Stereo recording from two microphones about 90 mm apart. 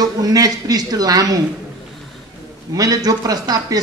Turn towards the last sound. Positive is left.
turn(degrees=-45)  # may be behind; listen again after turning